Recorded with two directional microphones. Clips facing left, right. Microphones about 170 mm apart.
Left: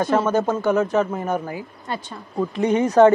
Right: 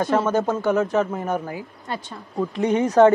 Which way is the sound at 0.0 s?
20° left (ahead or behind).